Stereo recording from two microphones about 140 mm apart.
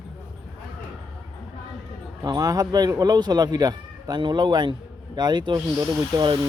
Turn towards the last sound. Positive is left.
turn(degrees=-30)  # may be behind; listen again after turning